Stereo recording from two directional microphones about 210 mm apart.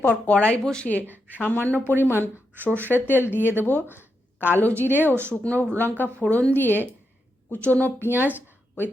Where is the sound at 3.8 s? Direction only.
10° right (ahead or behind).